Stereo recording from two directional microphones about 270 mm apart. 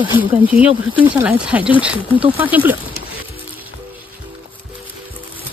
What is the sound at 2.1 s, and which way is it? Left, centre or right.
Speech, centre.